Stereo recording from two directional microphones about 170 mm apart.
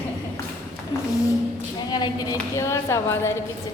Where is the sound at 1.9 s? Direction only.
25° left (ahead or behind).